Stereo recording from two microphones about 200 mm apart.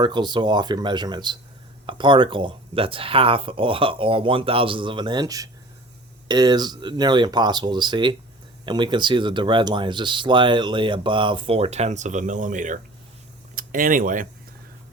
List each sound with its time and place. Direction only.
0.0 s speech: 20° right (ahead or behind); by 14.3 s 45° right (ahead or behind)